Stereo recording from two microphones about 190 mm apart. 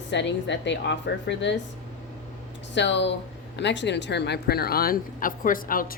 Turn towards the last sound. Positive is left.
turn(degrees=45)  # may be behind; listen again after turning